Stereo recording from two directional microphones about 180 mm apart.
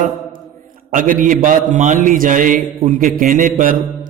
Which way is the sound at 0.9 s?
50° right (ahead or behind).